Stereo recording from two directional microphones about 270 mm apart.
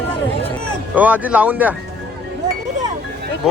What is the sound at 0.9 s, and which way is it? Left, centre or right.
Speech, centre.